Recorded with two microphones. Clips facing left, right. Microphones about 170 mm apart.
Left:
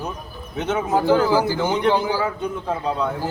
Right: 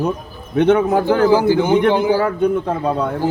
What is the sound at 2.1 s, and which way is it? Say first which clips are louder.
Speech: right 8 dB; 55° right (ahead or behind).